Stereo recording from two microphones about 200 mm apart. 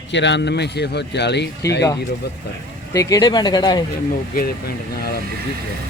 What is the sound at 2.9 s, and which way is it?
Speech, 15° left (ahead or behind).